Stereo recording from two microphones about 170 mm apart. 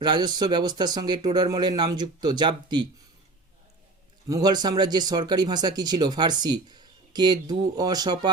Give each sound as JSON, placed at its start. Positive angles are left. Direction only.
{"t": 0.0, "sound": "speech", "side_deg": -25}
{"t": 4.3, "sound": "speech", "side_deg": -25}